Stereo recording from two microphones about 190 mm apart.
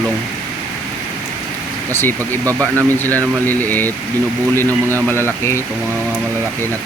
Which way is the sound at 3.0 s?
10° left (ahead or behind).